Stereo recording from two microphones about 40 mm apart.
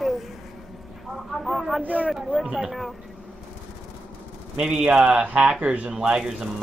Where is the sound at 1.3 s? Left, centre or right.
Centre.